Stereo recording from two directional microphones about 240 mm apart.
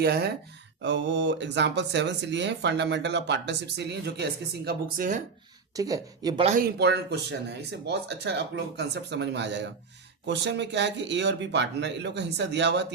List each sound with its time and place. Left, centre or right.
0.0 s speech: right
5.7 s speech: centre
6.7 s speech: right